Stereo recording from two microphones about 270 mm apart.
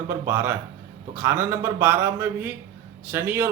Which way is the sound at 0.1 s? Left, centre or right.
Centre.